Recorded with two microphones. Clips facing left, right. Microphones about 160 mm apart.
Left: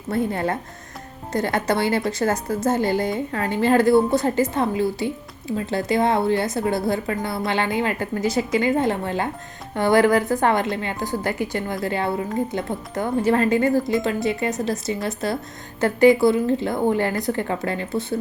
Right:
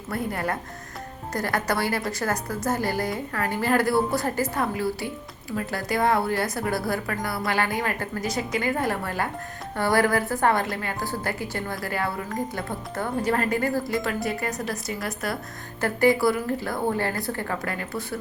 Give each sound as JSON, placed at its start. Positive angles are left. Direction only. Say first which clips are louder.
{"t": 0.1, "sound": "a woman's voice", "louder": "left 5 dB", "side_deg": 25}